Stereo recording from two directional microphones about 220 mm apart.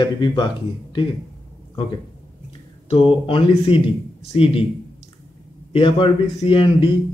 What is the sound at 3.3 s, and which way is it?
Speech, 25° left (ahead or behind).